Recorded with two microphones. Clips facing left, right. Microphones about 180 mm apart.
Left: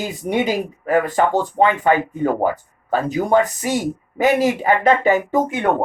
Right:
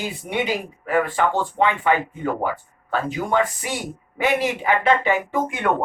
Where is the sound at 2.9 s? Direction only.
40° left (ahead or behind).